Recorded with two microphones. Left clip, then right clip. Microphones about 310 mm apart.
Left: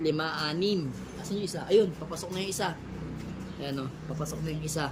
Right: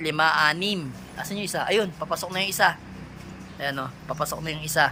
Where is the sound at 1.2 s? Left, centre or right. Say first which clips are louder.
Right 8 dB; centre.